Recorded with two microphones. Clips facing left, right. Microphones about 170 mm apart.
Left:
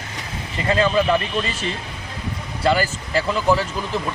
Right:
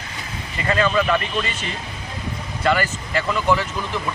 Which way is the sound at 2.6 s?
30° left (ahead or behind).